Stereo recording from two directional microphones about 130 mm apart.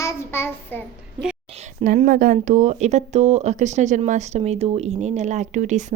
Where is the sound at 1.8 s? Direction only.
90° right; by 5.8 s 65° right (ahead or behind).